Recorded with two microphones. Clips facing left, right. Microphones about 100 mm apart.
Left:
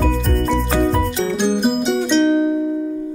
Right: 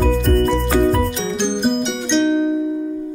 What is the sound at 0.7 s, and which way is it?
Music, 5° left (ahead or behind).